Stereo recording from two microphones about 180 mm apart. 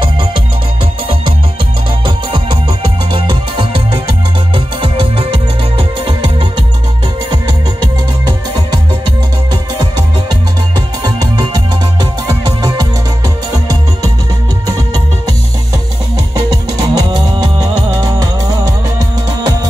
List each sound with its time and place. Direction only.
2.0 s music: 30° right (ahead or behind)
11.1 s music: 25° right (ahead or behind)
16.8 s music: 25° right (ahead or behind)